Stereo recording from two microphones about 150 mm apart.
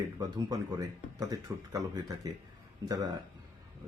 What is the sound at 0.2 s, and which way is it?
Speech, 25° right (ahead or behind).